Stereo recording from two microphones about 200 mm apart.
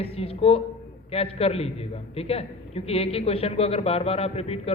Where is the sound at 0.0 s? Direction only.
30° left (ahead or behind).